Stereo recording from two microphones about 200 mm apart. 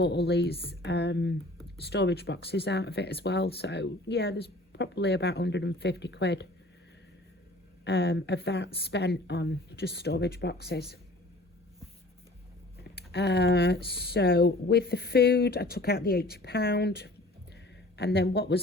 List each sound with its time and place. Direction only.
0.0 s speech: 60° left (ahead or behind)
7.9 s speech: 65° left (ahead or behind)
13.0 s speech: 55° left (ahead or behind)